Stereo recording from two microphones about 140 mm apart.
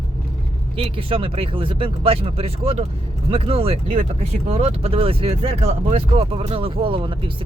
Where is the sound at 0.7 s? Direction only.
40° right (ahead or behind).